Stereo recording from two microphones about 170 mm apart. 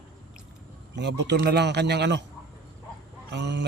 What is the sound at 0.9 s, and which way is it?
A man's voice, 90° right.